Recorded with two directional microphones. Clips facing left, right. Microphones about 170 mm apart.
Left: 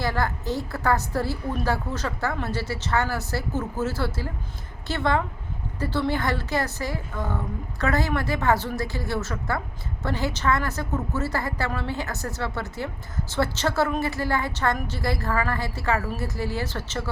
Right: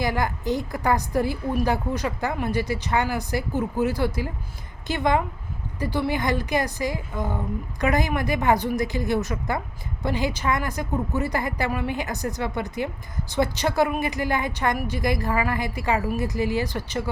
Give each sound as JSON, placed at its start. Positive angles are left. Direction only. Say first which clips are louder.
{"t": 0.0, "sound": "a woman's voice", "louder": "right 2 dB", "side_deg": -15}